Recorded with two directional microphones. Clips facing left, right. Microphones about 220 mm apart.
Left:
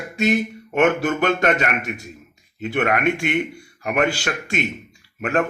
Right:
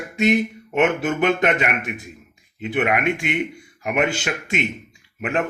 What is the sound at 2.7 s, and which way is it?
Speech, 10° right (ahead or behind).